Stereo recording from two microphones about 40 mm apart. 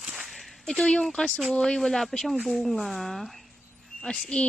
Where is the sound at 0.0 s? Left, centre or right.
Right.